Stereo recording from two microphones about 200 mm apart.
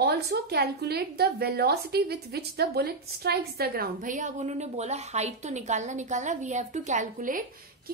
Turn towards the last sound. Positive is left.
turn(degrees=-40)  # may be behind; listen again after turning